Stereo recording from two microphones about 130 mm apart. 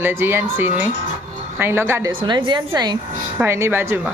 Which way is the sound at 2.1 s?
40° right (ahead or behind).